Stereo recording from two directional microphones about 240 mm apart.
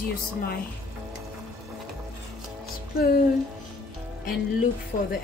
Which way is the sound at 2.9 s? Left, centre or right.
Left.